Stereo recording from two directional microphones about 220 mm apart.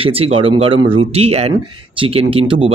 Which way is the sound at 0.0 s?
25° right (ahead or behind).